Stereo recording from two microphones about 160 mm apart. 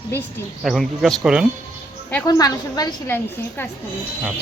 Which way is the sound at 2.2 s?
25° left (ahead or behind).